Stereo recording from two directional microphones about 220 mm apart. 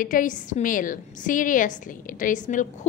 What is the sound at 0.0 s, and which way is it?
A woman's voice, 35° left (ahead or behind).